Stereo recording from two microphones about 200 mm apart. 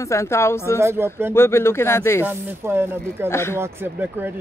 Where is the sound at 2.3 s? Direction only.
10° right (ahead or behind).